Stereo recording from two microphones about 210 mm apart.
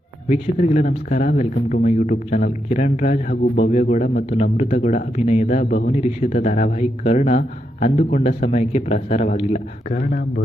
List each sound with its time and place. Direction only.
0.3 s speech: 35° left (ahead or behind)